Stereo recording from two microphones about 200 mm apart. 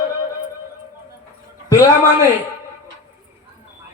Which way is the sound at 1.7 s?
15° left (ahead or behind).